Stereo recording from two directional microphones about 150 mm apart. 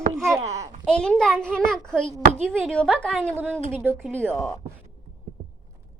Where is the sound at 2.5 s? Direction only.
5° right (ahead or behind).